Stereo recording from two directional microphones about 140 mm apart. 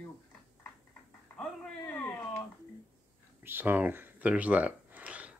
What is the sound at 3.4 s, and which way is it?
Speech, 15° right (ahead or behind).